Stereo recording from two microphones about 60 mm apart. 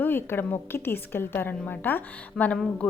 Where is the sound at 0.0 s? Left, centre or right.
Left.